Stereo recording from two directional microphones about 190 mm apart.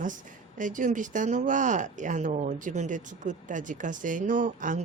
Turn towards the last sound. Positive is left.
turn(degrees=-40)  # may be behind; listen again after turning